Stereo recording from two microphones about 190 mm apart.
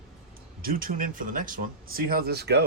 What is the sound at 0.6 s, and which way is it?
Speech, 50° right (ahead or behind).